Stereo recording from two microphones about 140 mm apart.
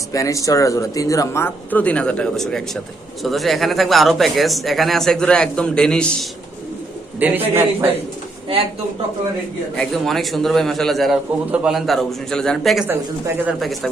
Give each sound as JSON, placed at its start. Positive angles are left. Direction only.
{"t": 0.1, "sound": "a man's voice", "side_deg": 25}
{"t": 7.2, "sound": "a man's voice", "side_deg": -15}
{"t": 9.7, "sound": "a man's voice", "side_deg": 5}